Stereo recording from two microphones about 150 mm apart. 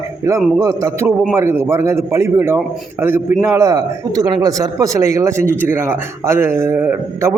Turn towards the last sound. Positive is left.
turn(degrees=-15)  # may be behind; listen again after turning